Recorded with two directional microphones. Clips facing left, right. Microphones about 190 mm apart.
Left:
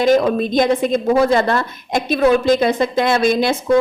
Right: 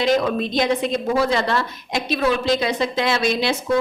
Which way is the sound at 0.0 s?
45° left (ahead or behind).